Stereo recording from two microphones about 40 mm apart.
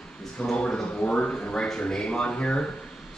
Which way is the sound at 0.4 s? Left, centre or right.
Centre.